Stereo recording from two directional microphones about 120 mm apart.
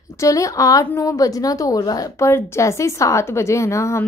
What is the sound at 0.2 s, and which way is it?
A woman's voice, 25° left (ahead or behind).